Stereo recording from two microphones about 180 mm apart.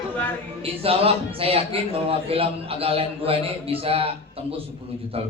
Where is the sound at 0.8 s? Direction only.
30° right (ahead or behind).